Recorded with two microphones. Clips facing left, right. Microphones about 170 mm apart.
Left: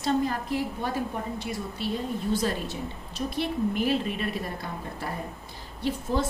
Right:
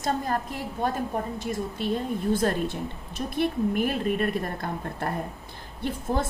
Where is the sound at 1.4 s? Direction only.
45° right (ahead or behind).